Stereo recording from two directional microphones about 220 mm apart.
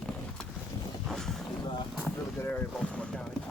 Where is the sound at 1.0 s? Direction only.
Centre (ahead or behind).